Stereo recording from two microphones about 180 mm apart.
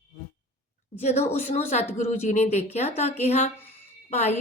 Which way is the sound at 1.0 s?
35° left (ahead or behind).